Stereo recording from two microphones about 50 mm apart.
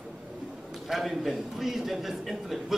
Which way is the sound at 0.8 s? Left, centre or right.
Centre.